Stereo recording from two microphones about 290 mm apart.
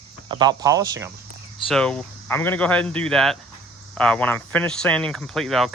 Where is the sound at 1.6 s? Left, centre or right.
Centre.